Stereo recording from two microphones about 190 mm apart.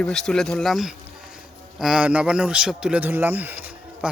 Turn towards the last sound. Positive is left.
turn(degrees=-10)  # may be behind; listen again after turning